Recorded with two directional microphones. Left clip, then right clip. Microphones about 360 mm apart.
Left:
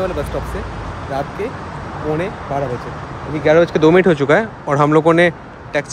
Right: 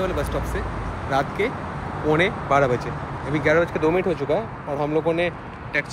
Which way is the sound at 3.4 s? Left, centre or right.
Centre.